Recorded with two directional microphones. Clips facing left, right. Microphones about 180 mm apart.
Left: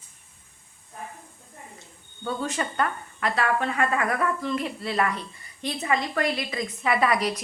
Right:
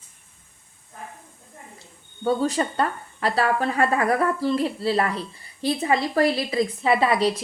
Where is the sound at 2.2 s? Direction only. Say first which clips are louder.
Right 7 dB; 35° right (ahead or behind).